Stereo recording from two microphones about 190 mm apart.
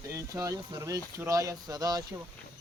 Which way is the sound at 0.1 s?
15° right (ahead or behind).